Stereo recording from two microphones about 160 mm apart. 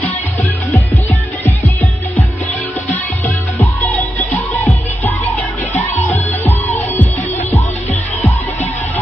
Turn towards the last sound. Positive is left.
turn(degrees=10)  # may be behind; listen again after turning